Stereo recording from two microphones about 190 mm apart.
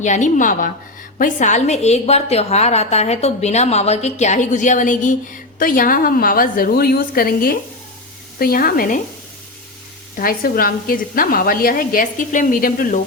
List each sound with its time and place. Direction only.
0.0 s a woman's voice: 40° left (ahead or behind)
10.2 s a woman's voice: 50° left (ahead or behind)